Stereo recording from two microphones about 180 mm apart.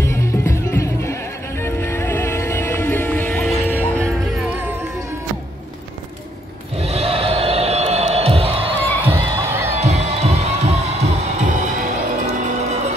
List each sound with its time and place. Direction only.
0.0 s music: 15° left (ahead or behind)
6.8 s music: 35° right (ahead or behind)
9.0 s crowd: 15° right (ahead or behind)
9.7 s crowd: 35° right (ahead or behind)